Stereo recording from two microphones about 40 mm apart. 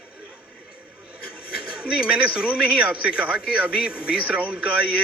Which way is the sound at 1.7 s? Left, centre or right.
Right.